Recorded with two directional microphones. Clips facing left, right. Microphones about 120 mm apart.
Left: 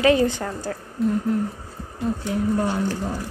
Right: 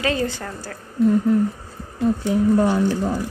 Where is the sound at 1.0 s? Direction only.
Centre (ahead or behind).